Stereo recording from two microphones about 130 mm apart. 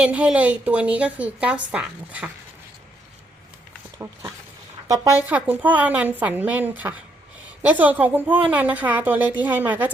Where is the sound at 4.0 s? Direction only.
25° right (ahead or behind).